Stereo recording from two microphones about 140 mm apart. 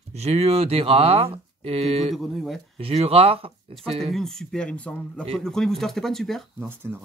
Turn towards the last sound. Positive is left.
turn(degrees=-15)  # may be behind; listen again after turning